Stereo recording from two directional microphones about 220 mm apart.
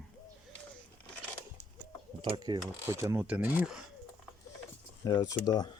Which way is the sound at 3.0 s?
10° right (ahead or behind).